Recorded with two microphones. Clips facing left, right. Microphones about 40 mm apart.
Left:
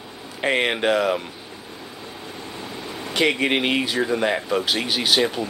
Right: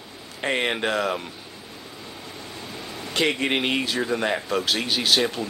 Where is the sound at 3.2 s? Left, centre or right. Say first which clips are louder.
Left 3 dB; centre.